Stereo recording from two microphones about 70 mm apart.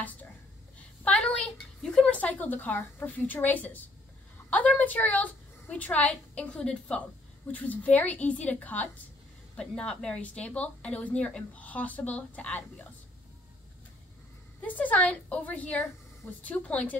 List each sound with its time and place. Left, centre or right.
0.7 s a sound: centre
2.0 s a woman's voice: left
9.6 s a woman's voice: centre
14.6 s a woman's voice: left